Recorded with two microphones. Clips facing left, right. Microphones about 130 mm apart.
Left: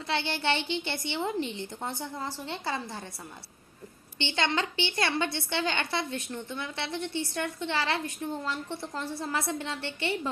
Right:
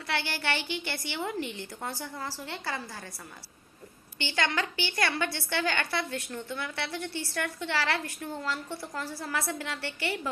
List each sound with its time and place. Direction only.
0.1 s a woman's voice: 20° left (ahead or behind)
4.2 s a woman's voice: 25° left (ahead or behind)